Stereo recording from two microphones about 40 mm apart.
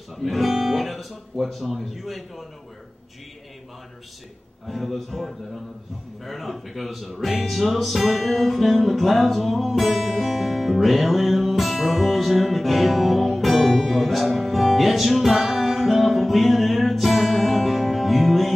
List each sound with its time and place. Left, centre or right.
0.1 s speech: centre
4.6 s a man's voice: centre
6.2 s music: centre